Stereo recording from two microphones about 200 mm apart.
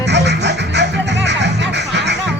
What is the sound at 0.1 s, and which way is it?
Music, 60° right (ahead or behind).